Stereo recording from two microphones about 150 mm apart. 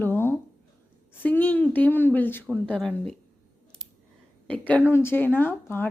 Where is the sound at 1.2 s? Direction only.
10° left (ahead or behind).